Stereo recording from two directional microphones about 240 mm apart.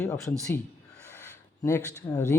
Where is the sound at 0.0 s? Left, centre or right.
Centre.